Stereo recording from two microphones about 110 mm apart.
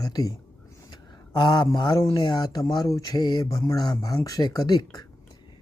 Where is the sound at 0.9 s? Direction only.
45° left (ahead or behind).